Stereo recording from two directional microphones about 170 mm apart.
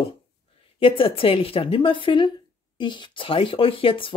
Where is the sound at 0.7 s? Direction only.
30° left (ahead or behind).